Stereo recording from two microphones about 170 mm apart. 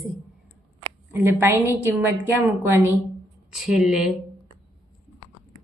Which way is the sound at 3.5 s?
5° right (ahead or behind).